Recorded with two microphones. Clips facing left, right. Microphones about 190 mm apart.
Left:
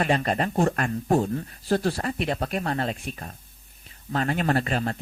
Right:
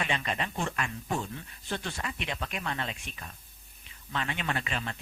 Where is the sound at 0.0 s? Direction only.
45° left (ahead or behind).